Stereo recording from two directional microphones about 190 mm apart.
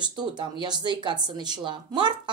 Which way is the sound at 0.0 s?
25° right (ahead or behind).